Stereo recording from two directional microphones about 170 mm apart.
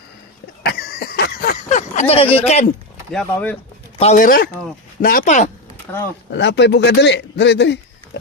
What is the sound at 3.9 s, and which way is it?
Speech, 40° left (ahead or behind).